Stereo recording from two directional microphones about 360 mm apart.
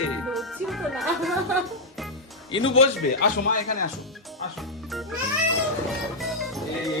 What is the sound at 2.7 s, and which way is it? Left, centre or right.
A man's voice, centre.